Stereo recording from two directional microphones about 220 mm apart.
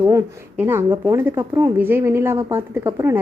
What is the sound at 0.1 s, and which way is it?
Speech, 10° right (ahead or behind).